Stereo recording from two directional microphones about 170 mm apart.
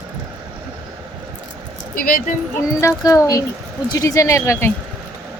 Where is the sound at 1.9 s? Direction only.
60° left (ahead or behind).